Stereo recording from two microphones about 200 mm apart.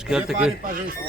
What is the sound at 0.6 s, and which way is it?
Speech, 45° right (ahead or behind).